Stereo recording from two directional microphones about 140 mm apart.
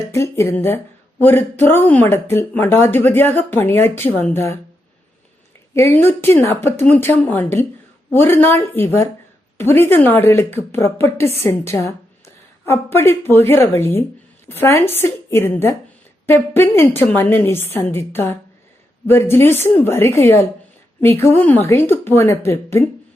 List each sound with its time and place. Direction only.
0.1 s a woman's voice: 20° left (ahead or behind)
5.7 s a woman's voice: 15° left (ahead or behind)